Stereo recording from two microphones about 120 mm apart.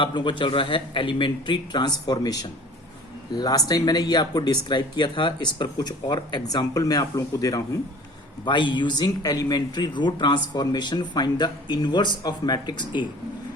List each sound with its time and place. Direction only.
0.0 s a man's voice: 40° left (ahead or behind)
8.4 s speech: 40° left (ahead or behind)